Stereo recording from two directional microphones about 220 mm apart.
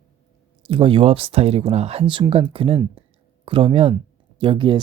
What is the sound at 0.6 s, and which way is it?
Speech, 25° right (ahead or behind).